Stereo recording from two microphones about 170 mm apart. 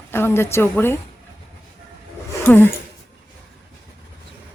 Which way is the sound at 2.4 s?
10° left (ahead or behind).